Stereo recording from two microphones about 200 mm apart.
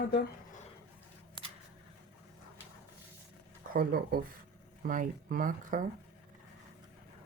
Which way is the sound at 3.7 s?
45° right (ahead or behind).